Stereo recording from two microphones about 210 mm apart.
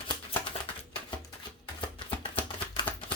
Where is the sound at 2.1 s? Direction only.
25° left (ahead or behind).